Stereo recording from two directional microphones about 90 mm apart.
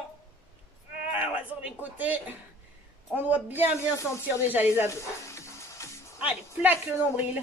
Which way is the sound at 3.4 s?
15° right (ahead or behind).